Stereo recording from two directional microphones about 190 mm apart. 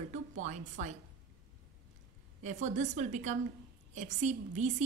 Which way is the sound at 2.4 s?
40° right (ahead or behind).